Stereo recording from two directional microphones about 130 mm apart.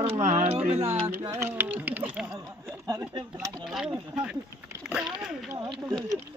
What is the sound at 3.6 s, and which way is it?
Speech, 5° right (ahead or behind).